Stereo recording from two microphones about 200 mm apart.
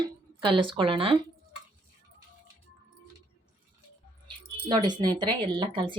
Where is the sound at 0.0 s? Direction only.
25° right (ahead or behind).